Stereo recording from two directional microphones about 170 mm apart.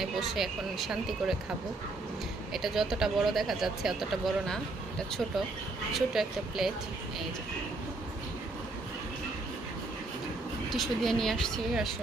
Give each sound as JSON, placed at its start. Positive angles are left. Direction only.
{"t": 0.0, "sound": "speech", "side_deg": 0}
{"t": 2.5, "sound": "speech", "side_deg": 0}
{"t": 10.7, "sound": "speech", "side_deg": 0}